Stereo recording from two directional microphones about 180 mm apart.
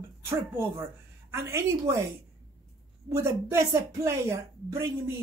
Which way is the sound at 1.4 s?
15° right (ahead or behind).